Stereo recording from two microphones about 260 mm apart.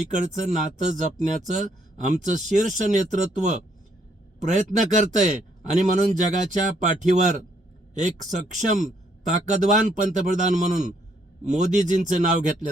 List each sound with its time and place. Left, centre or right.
0.1 s speech: right